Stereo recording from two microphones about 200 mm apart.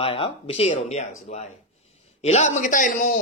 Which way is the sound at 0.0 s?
30° left (ahead or behind).